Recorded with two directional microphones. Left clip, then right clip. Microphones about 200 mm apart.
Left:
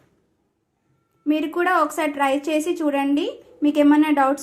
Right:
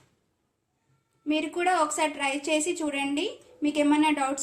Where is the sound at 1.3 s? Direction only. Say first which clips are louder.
Left 6 dB; 30° left (ahead or behind).